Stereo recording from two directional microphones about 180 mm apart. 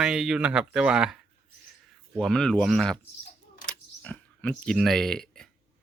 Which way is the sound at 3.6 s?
5° left (ahead or behind).